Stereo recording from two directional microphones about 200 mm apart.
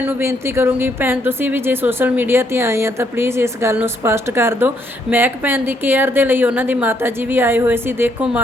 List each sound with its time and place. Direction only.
0.0 s a woman's voice: 10° right (ahead or behind)